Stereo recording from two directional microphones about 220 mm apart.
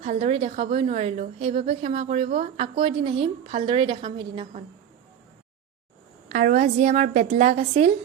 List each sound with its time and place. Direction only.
0.0 s a woman's voice: 30° right (ahead or behind)
6.2 s a woman's voice: 35° right (ahead or behind)